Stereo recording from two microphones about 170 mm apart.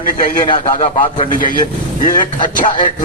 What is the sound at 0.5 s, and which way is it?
Speech, 35° left (ahead or behind).